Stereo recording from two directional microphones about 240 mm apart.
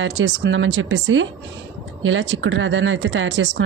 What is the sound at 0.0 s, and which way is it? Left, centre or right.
Speech, right.